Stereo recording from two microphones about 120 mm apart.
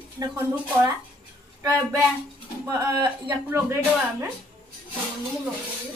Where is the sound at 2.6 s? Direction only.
35° right (ahead or behind).